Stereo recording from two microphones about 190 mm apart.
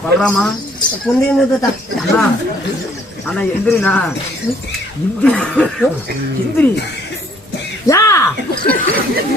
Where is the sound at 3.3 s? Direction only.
10° left (ahead or behind).